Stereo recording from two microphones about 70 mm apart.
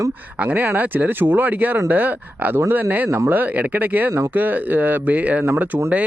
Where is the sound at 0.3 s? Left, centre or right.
Right.